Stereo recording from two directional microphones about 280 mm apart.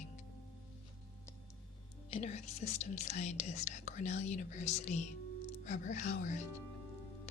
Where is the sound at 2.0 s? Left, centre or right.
Left.